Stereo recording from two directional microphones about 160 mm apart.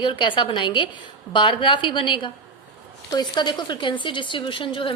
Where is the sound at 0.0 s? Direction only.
30° left (ahead or behind).